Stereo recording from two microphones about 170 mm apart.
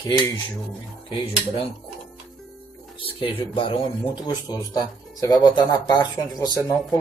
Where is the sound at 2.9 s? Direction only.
30° left (ahead or behind).